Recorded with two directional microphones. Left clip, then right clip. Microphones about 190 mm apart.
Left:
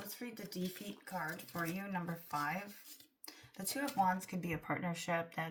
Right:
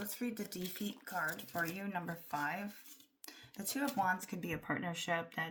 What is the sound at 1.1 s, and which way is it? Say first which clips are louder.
Speech: right 3 dB; 35° right (ahead or behind).